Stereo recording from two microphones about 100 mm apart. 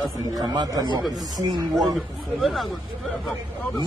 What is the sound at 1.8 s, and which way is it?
Speech, centre (ahead or behind).